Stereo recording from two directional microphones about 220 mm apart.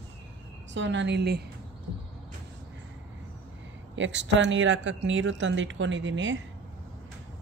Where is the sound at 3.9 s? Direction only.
55° right (ahead or behind).